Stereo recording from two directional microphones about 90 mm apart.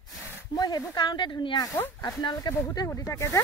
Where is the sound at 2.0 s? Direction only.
45° left (ahead or behind).